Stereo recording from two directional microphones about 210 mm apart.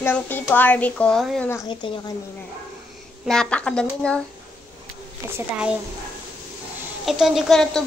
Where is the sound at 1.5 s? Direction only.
20° left (ahead or behind).